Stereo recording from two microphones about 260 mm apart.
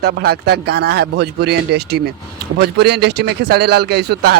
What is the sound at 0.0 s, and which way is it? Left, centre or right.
Speech, right.